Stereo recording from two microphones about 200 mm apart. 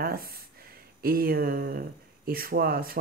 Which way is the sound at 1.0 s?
50° right (ahead or behind).